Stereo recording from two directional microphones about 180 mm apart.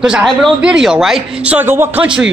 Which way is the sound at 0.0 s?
Centre (ahead or behind).